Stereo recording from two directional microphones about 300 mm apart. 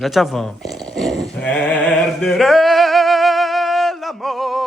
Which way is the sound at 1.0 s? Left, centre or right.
Centre.